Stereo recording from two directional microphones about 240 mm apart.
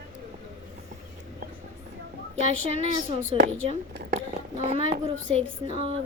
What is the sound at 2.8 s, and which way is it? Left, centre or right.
A woman's voice, right.